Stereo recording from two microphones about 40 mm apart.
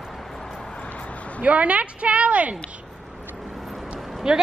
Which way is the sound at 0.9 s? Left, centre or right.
Left.